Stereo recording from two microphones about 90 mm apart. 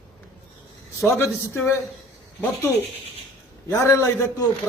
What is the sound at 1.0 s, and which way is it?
Speech, 30° left (ahead or behind).